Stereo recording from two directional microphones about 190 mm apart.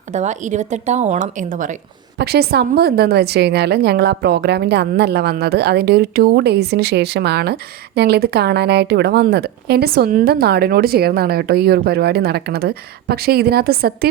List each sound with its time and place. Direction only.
0.1 s a woman's voice: 40° right (ahead or behind)
2.1 s a woman's voice: 55° right (ahead or behind)